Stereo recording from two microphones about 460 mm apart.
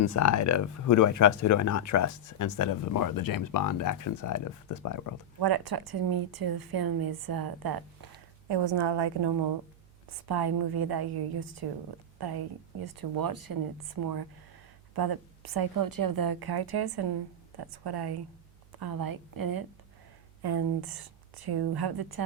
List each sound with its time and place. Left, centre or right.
0.0 s speech: left
5.4 s a woman's voice: right
8.4 s a woman's voice: right